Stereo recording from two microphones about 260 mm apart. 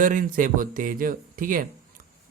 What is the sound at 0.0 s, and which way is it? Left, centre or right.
Speech, right.